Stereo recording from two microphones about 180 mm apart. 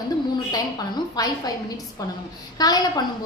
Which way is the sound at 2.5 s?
20° left (ahead or behind).